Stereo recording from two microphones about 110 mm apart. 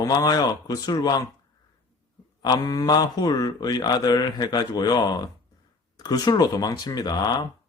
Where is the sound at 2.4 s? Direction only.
35° left (ahead or behind).